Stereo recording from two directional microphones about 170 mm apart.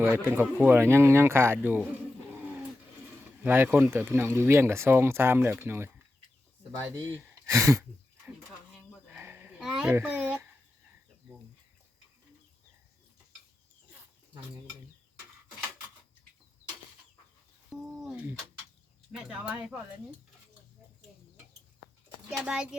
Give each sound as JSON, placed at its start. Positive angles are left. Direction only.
{"t": 0.3, "sound": "speech", "side_deg": -10}
{"t": 3.4, "sound": "speech", "side_deg": -10}
{"t": 7.2, "sound": "speech", "side_deg": -15}
{"t": 9.0, "sound": "a sound", "side_deg": -15}
{"t": 9.6, "sound": "a child's voice", "side_deg": -5}
{"t": 17.7, "sound": "a sound", "side_deg": -5}
{"t": 19.1, "sound": "speech", "side_deg": -5}
{"t": 22.3, "sound": "a child's voice", "side_deg": -5}